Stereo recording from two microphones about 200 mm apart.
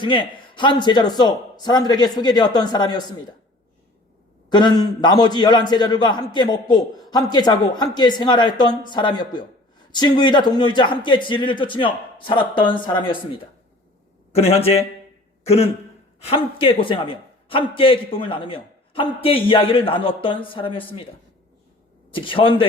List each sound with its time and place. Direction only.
0.0 s a man's voice: 25° left (ahead or behind)
4.4 s a man's voice: 20° left (ahead or behind)
22.1 s a man's voice: 25° left (ahead or behind)